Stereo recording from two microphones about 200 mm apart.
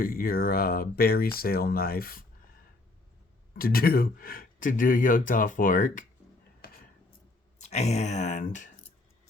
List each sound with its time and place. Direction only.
0.0 s speech: 45° left (ahead or behind)
3.5 s speech: 45° left (ahead or behind)
7.6 s speech: 35° left (ahead or behind)